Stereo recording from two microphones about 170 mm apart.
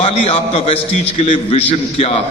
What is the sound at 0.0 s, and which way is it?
A man's voice, 35° left (ahead or behind).